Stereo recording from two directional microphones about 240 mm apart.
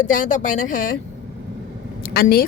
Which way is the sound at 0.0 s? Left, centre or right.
Left.